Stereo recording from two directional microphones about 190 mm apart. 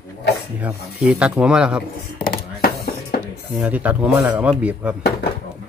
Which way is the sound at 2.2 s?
55° left (ahead or behind).